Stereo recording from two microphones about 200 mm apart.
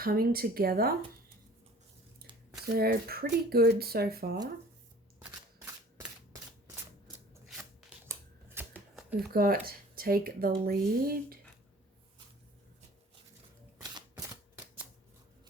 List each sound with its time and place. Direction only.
0.0 s speech: 50° right (ahead or behind)
2.7 s speech: 50° right (ahead or behind)
5.2 s a sound: 10° right (ahead or behind)
7.4 s scissors: centre (ahead or behind)
8.5 s shuffling cards: 10° right (ahead or behind)
9.1 s speech: 50° right (ahead or behind)